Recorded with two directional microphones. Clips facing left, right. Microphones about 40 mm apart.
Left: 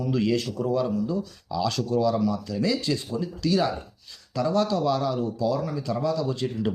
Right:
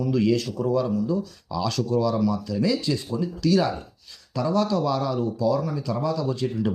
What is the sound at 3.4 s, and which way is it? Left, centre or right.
Speech, centre.